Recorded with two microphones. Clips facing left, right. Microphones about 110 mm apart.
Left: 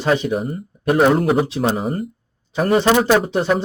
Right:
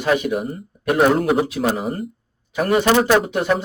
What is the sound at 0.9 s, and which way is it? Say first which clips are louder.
Speech: left 1 dB; centre (ahead or behind).